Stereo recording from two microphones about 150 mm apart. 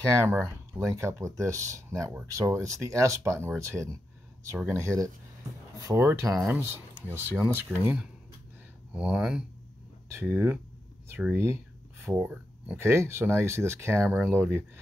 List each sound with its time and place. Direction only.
0.2 s speech: 15° right (ahead or behind)
10.0 s speech: 15° right (ahead or behind)